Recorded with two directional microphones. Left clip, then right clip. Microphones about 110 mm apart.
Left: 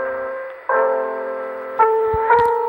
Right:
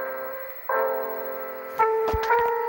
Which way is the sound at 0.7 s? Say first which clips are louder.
Left 7 dB; 25° left (ahead or behind).